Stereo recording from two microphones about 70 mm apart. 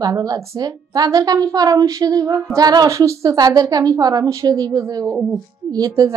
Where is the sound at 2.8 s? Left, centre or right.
Right.